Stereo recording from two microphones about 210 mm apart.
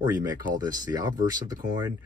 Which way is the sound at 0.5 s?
20° right (ahead or behind).